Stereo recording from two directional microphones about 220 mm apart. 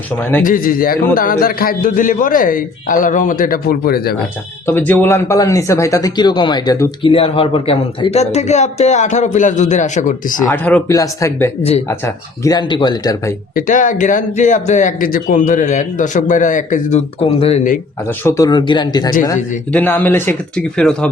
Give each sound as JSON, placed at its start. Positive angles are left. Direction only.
{"t": 0.4, "sound": "speech", "side_deg": 40}
{"t": 4.6, "sound": "speech", "side_deg": 10}
{"t": 10.4, "sound": "speech", "side_deg": 10}
{"t": 13.6, "sound": "speech", "side_deg": 35}
{"t": 18.2, "sound": "speech", "side_deg": 15}
{"t": 19.7, "sound": "speech", "side_deg": 10}